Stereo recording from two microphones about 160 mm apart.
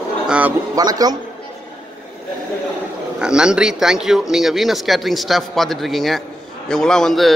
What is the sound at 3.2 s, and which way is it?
A man's voice, 5° right (ahead or behind).